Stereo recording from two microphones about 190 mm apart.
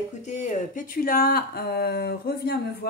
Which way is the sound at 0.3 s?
40° left (ahead or behind).